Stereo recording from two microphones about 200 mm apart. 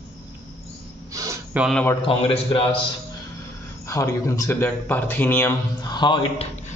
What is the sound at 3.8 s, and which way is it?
A man's voice, 15° left (ahead or behind).